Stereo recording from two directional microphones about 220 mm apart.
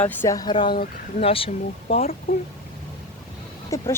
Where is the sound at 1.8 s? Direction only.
40° left (ahead or behind).